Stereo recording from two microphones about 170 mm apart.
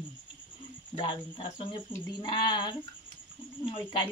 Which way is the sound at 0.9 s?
30° left (ahead or behind).